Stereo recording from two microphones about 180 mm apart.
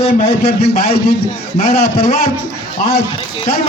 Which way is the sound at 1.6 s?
35° left (ahead or behind).